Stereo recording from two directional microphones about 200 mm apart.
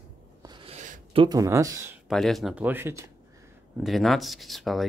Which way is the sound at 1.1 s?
20° right (ahead or behind).